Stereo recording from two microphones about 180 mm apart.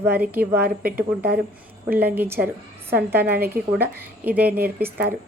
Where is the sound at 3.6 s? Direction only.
55° right (ahead or behind).